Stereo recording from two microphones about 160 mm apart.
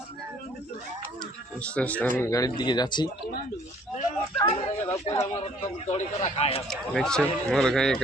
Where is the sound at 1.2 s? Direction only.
5° left (ahead or behind).